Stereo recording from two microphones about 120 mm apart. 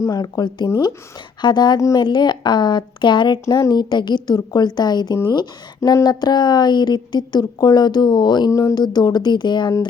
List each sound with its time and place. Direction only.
0.0 s a woman's voice: 30° left (ahead or behind)
1.4 s a woman's voice: 40° left (ahead or behind)